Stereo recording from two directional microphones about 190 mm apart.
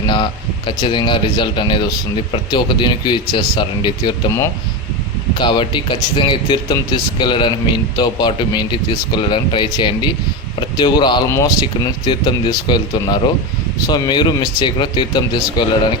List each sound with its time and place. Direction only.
0.0 s speech: 25° left (ahead or behind)